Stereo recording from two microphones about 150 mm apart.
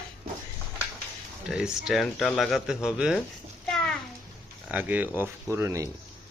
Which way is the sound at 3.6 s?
5° left (ahead or behind).